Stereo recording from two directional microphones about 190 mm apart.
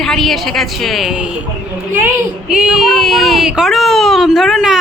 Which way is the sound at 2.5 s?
5° right (ahead or behind).